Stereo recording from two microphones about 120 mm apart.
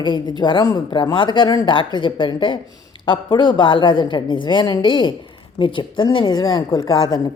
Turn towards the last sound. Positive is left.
turn(degrees=30)  # may be behind; listen again after turning